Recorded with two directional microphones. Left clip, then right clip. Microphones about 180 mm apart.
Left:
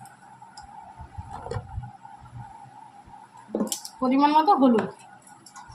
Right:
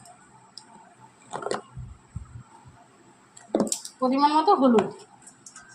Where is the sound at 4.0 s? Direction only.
25° right (ahead or behind).